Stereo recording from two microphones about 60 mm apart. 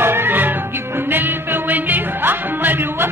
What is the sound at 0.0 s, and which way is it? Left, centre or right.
Music, right.